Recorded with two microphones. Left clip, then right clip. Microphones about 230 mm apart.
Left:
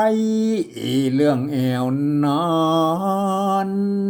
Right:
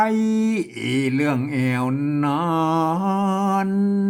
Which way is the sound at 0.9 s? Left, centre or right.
Centre.